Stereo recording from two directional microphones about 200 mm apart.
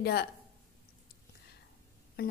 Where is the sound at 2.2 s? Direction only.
50° left (ahead or behind).